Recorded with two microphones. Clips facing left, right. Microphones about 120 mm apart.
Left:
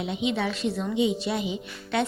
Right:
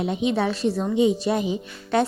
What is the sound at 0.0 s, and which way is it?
Speech, 40° right (ahead or behind).